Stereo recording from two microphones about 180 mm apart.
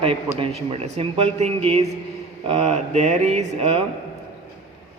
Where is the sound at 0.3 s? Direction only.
30° right (ahead or behind).